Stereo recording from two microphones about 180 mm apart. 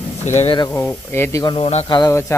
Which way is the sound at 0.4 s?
30° left (ahead or behind).